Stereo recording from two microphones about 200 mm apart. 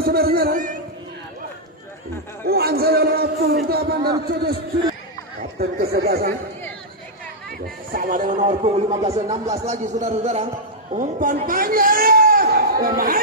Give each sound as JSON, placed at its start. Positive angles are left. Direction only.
{"t": 0.0, "sound": "music", "side_deg": -50}
{"t": 2.4, "sound": "a sound", "side_deg": -50}
{"t": 4.3, "sound": "speech", "side_deg": -50}
{"t": 5.6, "sound": "speech", "side_deg": -50}
{"t": 7.9, "sound": "speech", "side_deg": -45}